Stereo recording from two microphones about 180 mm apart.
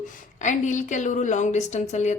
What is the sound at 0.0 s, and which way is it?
A woman's voice, 45° left (ahead or behind).